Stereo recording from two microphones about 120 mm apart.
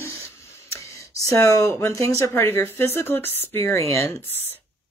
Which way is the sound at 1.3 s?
25° left (ahead or behind).